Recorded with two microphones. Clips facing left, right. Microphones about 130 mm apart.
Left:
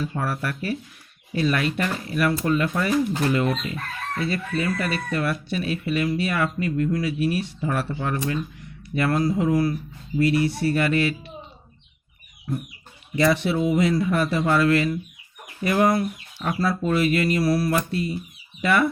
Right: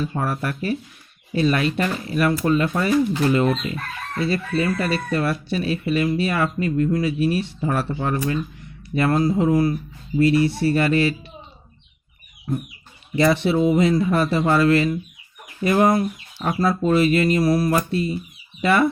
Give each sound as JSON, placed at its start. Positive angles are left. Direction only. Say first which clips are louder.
{"t": 0.2, "sound": "speech", "louder": "right 3 dB", "side_deg": -25}
{"t": 12.5, "sound": "speech", "louder": "right 3 dB", "side_deg": -30}